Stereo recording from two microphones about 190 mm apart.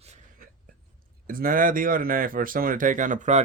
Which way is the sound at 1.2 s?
45° right (ahead or behind).